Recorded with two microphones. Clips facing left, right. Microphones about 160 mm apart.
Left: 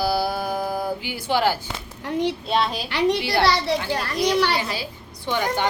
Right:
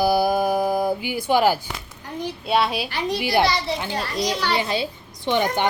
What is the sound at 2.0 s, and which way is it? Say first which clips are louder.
Speech: left 7 dB; 75° left (ahead or behind).